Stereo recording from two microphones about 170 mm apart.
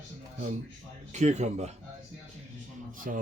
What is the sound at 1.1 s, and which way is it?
Speech, 45° right (ahead or behind).